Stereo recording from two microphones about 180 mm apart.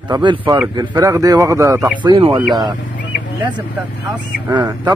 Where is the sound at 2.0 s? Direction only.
30° right (ahead or behind).